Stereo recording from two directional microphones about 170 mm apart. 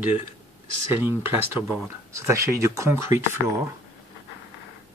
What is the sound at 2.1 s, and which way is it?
Speech, 15° right (ahead or behind).